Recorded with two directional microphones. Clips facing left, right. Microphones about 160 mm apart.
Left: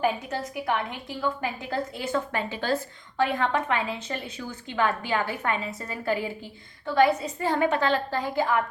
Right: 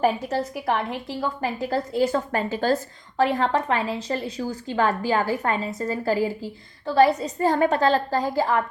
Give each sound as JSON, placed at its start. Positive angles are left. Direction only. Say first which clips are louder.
{"t": 0.0, "sound": "a woman's voice", "louder": "right 4 dB", "side_deg": -35}